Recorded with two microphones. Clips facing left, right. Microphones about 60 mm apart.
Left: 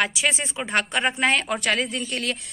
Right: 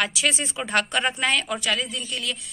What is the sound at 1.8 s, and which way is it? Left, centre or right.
Speech, left.